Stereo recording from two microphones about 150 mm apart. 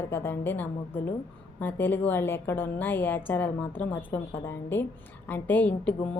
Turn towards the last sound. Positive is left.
turn(degrees=10)  # may be behind; listen again after turning